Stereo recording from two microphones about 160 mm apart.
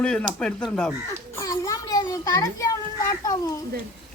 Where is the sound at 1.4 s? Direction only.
20° left (ahead or behind).